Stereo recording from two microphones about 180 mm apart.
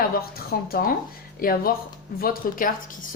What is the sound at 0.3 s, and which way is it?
A woman's voice, 55° left (ahead or behind).